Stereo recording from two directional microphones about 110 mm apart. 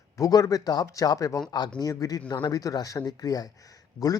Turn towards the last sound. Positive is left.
turn(degrees=35)  # may be behind; listen again after turning